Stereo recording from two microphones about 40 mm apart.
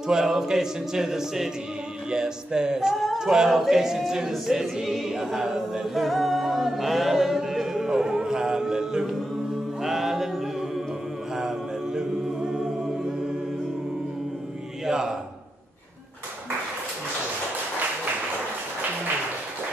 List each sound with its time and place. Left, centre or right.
0.0 s a capella: centre
3.4 s speech: centre
4.5 s a capella: centre
6.0 s music: centre
11.3 s a capella: centre
14.9 s a sound: centre